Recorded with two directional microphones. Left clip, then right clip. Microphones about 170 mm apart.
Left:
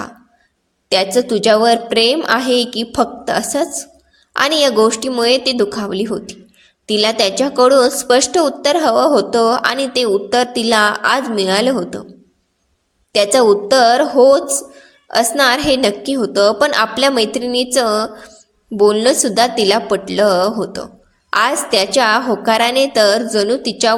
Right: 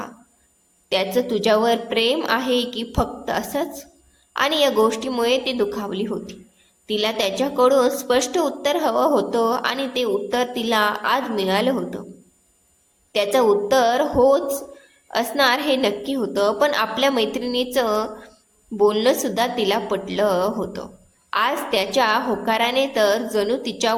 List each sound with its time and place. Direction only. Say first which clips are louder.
0.9 s a woman's voice: left 7 dB; 35° left (ahead or behind)
13.1 s a woman's voice: left 6 dB; 40° left (ahead or behind)